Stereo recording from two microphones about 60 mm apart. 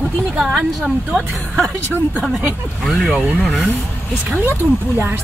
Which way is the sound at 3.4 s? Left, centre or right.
Centre.